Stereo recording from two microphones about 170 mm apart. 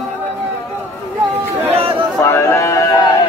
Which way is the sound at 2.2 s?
15° left (ahead or behind).